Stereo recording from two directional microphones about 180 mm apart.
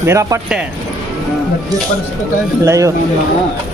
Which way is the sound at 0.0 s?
15° right (ahead or behind).